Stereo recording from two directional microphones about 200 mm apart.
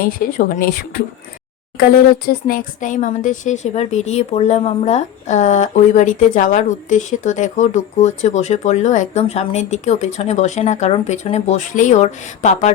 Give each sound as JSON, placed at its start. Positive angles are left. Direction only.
{"t": 0.0, "sound": "speech", "side_deg": 45}